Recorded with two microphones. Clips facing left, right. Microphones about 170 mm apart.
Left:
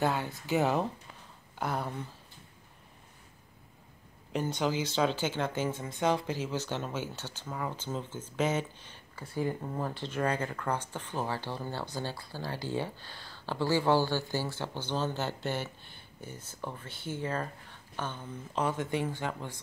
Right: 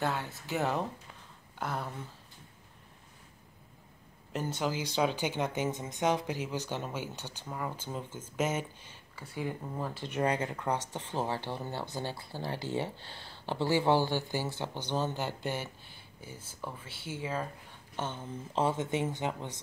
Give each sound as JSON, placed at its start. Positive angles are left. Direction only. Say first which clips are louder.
{"t": 0.0, "sound": "speech", "louder": "left 3 dB", "side_deg": 0}
{"t": 4.3, "sound": "speech", "louder": "left 3 dB", "side_deg": -5}
{"t": 17.9, "sound": "speech", "louder": "right 1 dB", "side_deg": -25}